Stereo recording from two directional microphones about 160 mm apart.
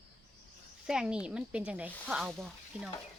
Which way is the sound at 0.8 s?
5° right (ahead or behind).